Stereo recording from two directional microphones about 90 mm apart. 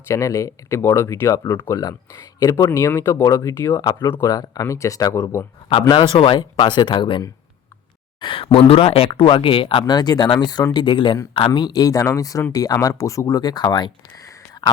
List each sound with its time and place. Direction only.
0.1 s speech: 35° left (ahead or behind)
1.8 s speech: 40° left (ahead or behind)
2.6 s speech: 30° left (ahead or behind)
4.0 s speech: 30° left (ahead or behind)
4.3 s speech: 45° left (ahead or behind)
5.9 s speech: 80° left
6.3 s speech: 55° left (ahead or behind)
8.2 s speech: 75° left (ahead or behind)
8.5 s speech: 90° left; by 9.8 s 75° left (ahead or behind)
9.8 s speech: 50° left (ahead or behind)
11.5 s speech: 50° left (ahead or behind)
14.3 s a sound: 45° left (ahead or behind)